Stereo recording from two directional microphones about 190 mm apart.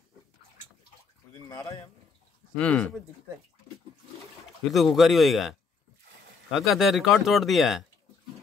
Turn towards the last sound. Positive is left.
turn(degrees=0)  # may be behind; listen again after turning